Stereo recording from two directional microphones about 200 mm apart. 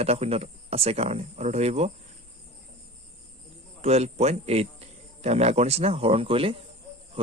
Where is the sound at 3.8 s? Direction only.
30° right (ahead or behind).